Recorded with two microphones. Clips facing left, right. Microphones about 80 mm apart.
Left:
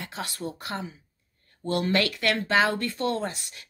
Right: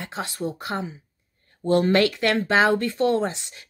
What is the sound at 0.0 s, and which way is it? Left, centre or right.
Speech, right.